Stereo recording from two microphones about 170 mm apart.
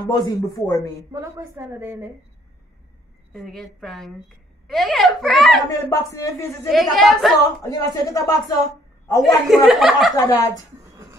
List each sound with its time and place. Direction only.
0.0 s speech: 20° left (ahead or behind)
1.1 s a woman's voice: 20° right (ahead or behind)
3.3 s a woman's voice: centre (ahead or behind)
5.7 s speech: 20° left (ahead or behind)
6.7 s a woman's voice: centre (ahead or behind)
7.6 s a woman's voice: 20° left (ahead or behind)
9.7 s a woman's voice: centre (ahead or behind)
10.1 s speech: 20° left (ahead or behind)
10.8 s a sound: 20° right (ahead or behind)